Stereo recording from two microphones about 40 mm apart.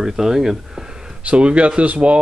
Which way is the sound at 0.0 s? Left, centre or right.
Centre.